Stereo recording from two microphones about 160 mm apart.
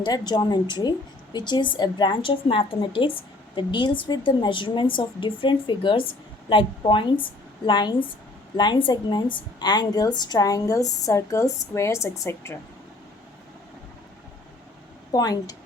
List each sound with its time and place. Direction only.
0.0 s a woman's voice: 25° left (ahead or behind)
15.1 s a woman's voice: 25° left (ahead or behind)